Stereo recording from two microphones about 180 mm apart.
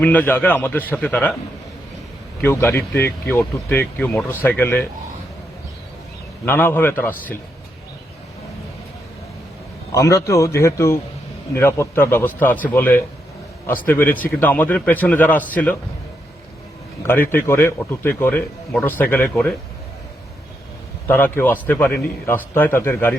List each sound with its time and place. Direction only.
0.0 s a man's voice: 10° left (ahead or behind)
2.4 s a man's voice: 10° left (ahead or behind)
6.4 s a man's voice: 10° left (ahead or behind)
9.9 s a man's voice: 15° left (ahead or behind)
17.0 s a man's voice: 10° left (ahead or behind)
21.1 s a man's voice: 10° left (ahead or behind)